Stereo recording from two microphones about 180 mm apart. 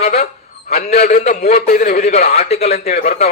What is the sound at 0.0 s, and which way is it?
A man's voice, 40° left (ahead or behind).